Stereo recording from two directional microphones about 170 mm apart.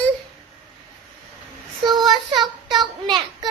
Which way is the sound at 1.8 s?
25° right (ahead or behind).